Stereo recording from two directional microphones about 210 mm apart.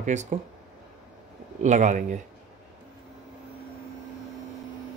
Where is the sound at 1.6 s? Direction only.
35° right (ahead or behind).